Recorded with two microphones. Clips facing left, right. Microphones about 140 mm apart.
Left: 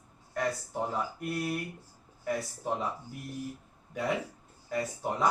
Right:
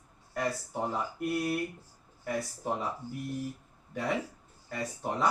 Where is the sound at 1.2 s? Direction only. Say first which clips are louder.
Right 3 dB; centre (ahead or behind).